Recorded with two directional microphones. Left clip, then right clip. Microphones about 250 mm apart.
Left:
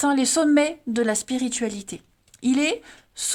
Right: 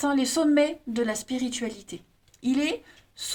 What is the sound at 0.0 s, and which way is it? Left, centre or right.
A woman's voice, left.